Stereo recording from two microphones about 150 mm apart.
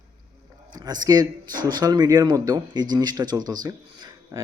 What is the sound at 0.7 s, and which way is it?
Speech, 25° right (ahead or behind).